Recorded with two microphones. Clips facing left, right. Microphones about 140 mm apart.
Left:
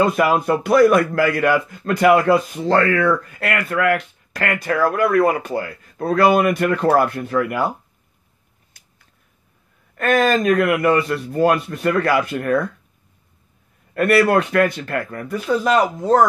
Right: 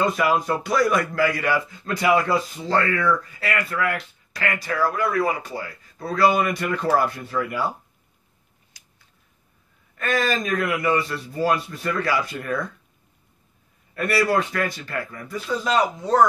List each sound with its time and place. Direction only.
0.1 s a man's voice: 50° left (ahead or behind)
8.7 s a sound: 55° left (ahead or behind)
9.9 s a man's voice: 55° left (ahead or behind)
13.9 s a man's voice: 60° left (ahead or behind)